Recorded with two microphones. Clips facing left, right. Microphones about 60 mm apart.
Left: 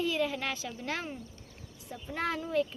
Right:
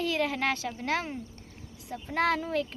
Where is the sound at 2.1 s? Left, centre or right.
Right.